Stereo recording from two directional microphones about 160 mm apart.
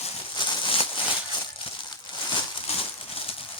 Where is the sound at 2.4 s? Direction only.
35° left (ahead or behind).